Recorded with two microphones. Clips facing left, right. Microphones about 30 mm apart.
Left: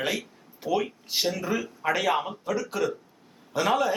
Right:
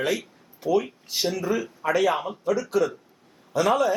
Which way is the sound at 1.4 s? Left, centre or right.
Centre.